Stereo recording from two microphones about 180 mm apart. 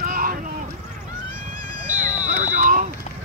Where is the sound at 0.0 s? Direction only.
50° right (ahead or behind).